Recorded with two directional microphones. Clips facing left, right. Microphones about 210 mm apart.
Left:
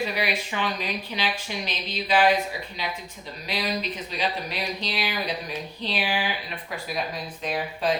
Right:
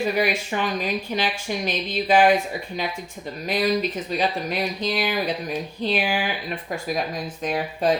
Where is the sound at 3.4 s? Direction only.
45° right (ahead or behind).